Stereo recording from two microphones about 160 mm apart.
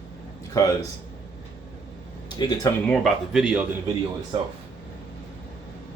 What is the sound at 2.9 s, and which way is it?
Speech, centre (ahead or behind).